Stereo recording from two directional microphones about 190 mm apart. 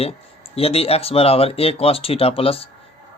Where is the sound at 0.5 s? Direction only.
30° left (ahead or behind).